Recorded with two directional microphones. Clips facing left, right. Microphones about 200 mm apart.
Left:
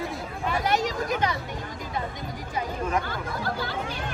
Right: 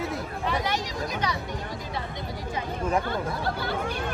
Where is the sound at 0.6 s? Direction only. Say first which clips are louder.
Left 4 dB; 45° left (ahead or behind).